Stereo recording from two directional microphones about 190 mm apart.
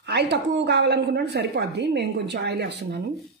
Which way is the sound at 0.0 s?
60° right (ahead or behind).